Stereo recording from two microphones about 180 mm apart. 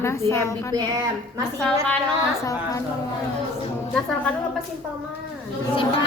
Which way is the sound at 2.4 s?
20° left (ahead or behind).